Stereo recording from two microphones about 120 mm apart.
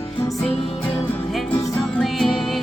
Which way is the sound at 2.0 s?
Centre (ahead or behind).